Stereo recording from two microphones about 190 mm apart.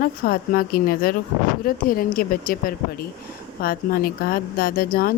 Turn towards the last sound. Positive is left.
turn(degrees=50)  # may be behind; listen again after turning